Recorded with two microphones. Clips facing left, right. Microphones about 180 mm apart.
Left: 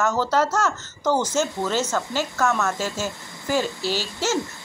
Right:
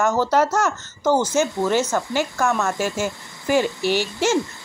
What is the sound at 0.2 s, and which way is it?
A woman's voice, 15° right (ahead or behind).